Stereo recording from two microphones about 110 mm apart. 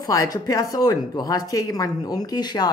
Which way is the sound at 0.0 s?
35° left (ahead or behind).